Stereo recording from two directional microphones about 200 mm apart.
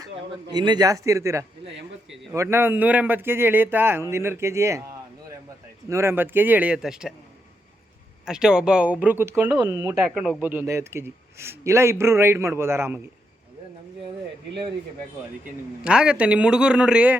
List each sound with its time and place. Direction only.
0.5 s a man's voice: 20° right (ahead or behind)
1.6 s speech: 65° right (ahead or behind)
2.3 s a man's voice: 15° right (ahead or behind)
5.9 s a man's voice: 15° right (ahead or behind)
8.2 s a man's voice: 5° right (ahead or behind)
9.9 s a man's voice: centre (ahead or behind)
15.8 s speech: 5° right (ahead or behind)